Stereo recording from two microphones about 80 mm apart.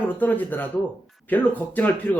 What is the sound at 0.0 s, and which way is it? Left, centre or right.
Speech, left.